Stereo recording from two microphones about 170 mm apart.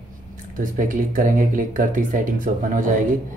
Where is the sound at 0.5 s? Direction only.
50° right (ahead or behind).